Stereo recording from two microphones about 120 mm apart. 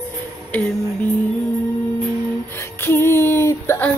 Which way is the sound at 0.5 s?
10° left (ahead or behind).